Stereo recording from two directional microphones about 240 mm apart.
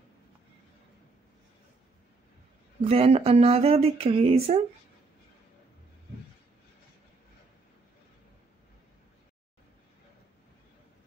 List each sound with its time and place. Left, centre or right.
2.8 s speech: right